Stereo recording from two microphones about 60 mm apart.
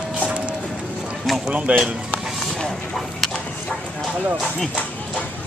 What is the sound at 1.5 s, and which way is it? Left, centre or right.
Speech, right.